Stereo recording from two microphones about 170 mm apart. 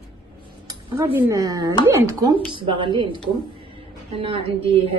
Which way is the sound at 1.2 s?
20° right (ahead or behind).